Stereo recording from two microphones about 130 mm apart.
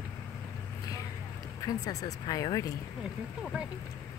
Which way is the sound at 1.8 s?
25° left (ahead or behind).